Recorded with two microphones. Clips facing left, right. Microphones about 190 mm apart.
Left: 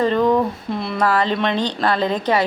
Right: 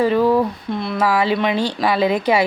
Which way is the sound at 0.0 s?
5° right (ahead or behind).